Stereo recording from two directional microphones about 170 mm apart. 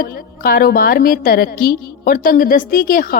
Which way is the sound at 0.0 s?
65° left (ahead or behind).